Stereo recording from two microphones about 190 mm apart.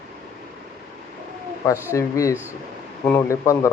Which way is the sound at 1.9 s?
15° left (ahead or behind).